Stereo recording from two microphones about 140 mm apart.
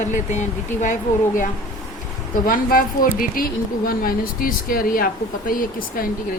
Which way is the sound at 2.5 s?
85° left.